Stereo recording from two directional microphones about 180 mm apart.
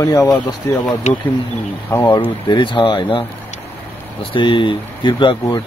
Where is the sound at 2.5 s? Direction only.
25° left (ahead or behind).